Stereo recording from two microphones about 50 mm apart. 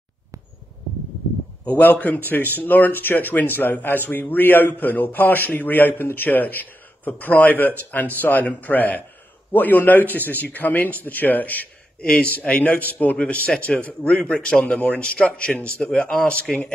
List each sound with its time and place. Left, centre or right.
1.6 s a man's voice: left
12.0 s a man's voice: left
16.5 s speech: centre